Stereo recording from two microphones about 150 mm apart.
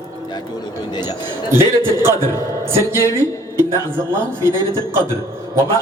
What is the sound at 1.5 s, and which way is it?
A man's voice, 15° right (ahead or behind).